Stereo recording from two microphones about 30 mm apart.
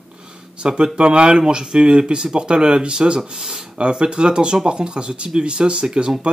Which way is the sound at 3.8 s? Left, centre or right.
Right.